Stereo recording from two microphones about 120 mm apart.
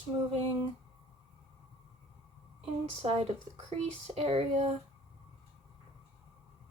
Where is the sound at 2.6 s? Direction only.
55° right (ahead or behind).